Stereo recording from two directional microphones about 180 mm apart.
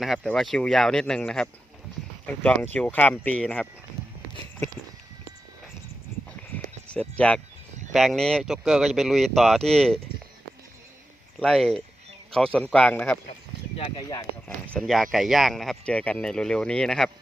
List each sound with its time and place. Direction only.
0.0 s speech: centre (ahead or behind)
6.8 s speech: 5° left (ahead or behind)
11.3 s speech: 5° left (ahead or behind)
13.7 s speech: 30° left (ahead or behind)
14.4 s speech: 5° left (ahead or behind)